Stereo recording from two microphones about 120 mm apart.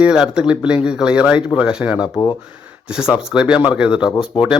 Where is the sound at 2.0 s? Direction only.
35° left (ahead or behind).